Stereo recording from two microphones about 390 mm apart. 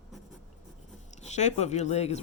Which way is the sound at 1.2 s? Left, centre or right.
Centre.